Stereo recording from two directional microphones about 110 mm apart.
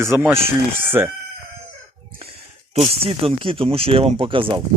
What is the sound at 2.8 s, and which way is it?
Speech, 60° right (ahead or behind).